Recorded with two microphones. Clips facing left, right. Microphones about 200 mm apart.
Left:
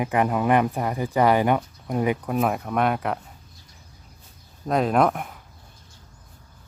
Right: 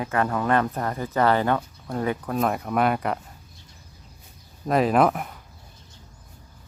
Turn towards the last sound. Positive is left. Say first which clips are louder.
# right 1 dB
turn(degrees=0)  # may be behind; listen again after turning